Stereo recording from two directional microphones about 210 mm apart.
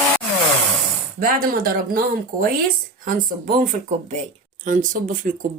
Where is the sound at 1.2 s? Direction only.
45° right (ahead or behind).